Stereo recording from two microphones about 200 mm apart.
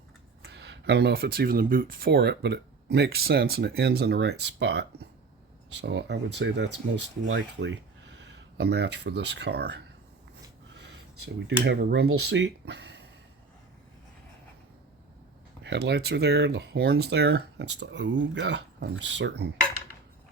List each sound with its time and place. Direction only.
0.4 s speech: 60° right (ahead or behind)
11.4 s speech: 60° right (ahead or behind)
15.6 s speech: 60° right (ahead or behind)